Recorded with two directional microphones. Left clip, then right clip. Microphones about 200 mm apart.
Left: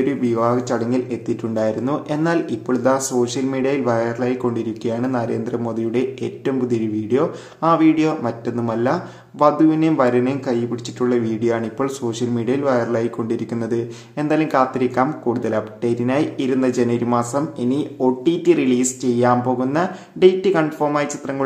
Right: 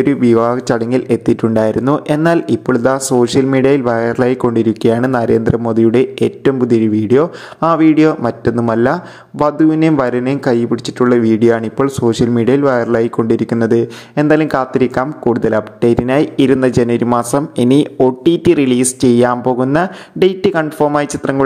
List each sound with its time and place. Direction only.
0.0 s speech: 40° right (ahead or behind)